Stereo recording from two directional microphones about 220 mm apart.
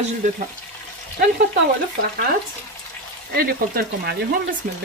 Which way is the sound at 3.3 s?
45° right (ahead or behind).